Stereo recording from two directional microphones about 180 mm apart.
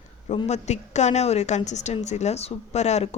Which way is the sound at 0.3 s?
40° left (ahead or behind).